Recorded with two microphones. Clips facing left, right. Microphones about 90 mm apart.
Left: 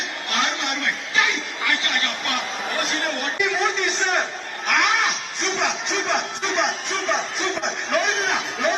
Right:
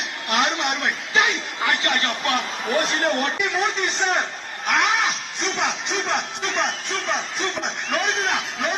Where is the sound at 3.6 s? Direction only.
Centre (ahead or behind).